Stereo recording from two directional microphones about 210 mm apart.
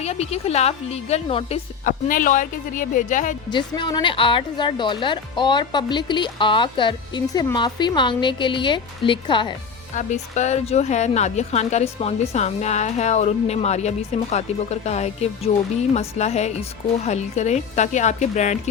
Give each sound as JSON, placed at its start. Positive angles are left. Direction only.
{"t": 0.0, "sound": "speech", "side_deg": 30}
{"t": 1.8, "sound": "a woman's voice", "side_deg": 40}
{"t": 3.5, "sound": "speech", "side_deg": 20}
{"t": 9.9, "sound": "a woman's voice", "side_deg": 35}